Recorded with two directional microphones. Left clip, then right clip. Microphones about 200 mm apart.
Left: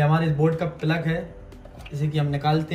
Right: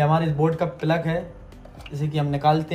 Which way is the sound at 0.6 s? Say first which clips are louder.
Right 3 dB; 25° right (ahead or behind).